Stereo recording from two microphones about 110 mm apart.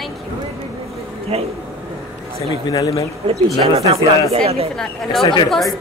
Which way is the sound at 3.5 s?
65° right (ahead or behind).